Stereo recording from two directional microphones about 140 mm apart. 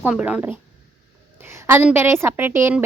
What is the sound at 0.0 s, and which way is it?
A woman's voice, 10° right (ahead or behind).